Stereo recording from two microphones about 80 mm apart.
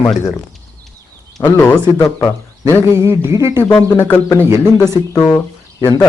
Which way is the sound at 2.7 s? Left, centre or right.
Right.